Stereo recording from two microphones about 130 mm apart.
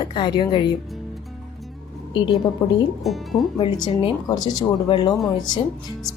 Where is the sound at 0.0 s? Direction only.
35° left (ahead or behind).